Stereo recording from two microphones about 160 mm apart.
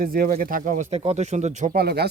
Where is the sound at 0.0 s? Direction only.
65° right (ahead or behind); by 1.7 s 45° right (ahead or behind).